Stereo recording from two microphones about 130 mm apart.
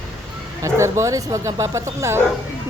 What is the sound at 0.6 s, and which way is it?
Speech, 20° right (ahead or behind).